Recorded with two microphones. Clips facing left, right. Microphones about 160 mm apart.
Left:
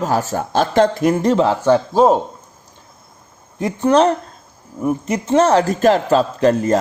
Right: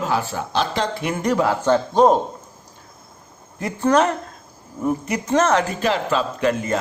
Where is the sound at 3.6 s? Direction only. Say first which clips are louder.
Left 4 dB; 20° left (ahead or behind); by 6.8 s 40° left (ahead or behind).